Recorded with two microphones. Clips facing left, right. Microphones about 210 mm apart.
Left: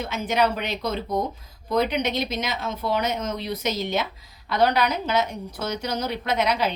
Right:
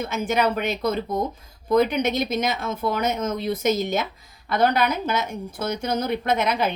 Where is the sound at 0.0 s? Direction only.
50° right (ahead or behind).